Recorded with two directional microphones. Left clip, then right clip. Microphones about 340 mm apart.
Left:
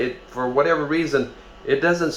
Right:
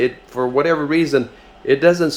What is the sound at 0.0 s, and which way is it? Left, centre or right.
Speech, right.